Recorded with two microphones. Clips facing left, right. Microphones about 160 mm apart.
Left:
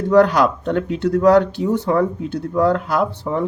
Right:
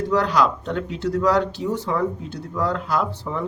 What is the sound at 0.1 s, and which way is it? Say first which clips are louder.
Speech: left 8 dB; 55° left (ahead or behind).